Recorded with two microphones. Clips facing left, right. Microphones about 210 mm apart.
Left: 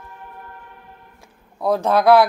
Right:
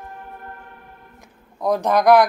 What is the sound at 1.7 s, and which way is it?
Speech, 15° right (ahead or behind).